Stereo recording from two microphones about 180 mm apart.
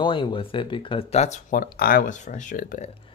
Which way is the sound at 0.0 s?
25° left (ahead or behind).